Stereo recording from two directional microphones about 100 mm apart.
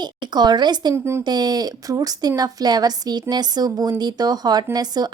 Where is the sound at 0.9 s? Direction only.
25° right (ahead or behind).